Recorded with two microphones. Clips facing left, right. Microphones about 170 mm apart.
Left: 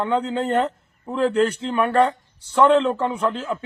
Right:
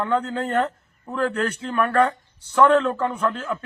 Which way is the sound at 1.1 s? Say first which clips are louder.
Left 5 dB; 25° left (ahead or behind).